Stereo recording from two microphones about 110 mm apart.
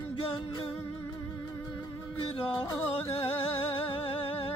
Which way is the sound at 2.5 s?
40° left (ahead or behind).